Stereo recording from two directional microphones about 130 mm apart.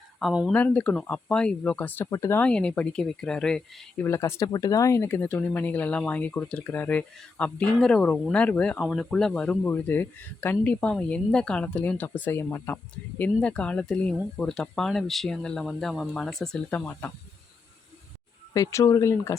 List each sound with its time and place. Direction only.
0.2 s speech: centre (ahead or behind)
0.5 s speech: 10° left (ahead or behind)
2.0 s speech: 25° left (ahead or behind)
2.4 s speech: 10° left (ahead or behind)
4.0 s speech: 20° left (ahead or behind); by 16.7 s 5° left (ahead or behind)
16.7 s speech: 15° left (ahead or behind)
18.5 s speech: 25° left (ahead or behind)